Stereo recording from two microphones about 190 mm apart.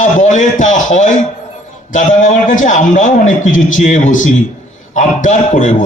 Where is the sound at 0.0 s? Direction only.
40° left (ahead or behind).